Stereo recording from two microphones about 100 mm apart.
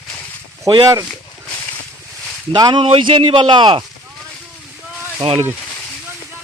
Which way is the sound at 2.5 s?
50° right (ahead or behind).